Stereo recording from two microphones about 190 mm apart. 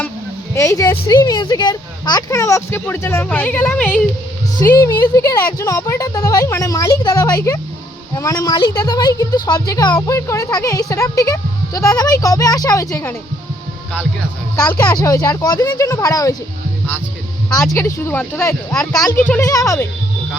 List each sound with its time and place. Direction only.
0.5 s a woman's voice: 15° left (ahead or behind)
14.5 s a woman's voice: 15° left (ahead or behind)
17.5 s a woman's voice: 15° left (ahead or behind)